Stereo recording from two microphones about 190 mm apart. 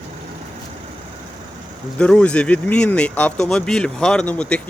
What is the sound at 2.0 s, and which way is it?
Speech, 5° left (ahead or behind).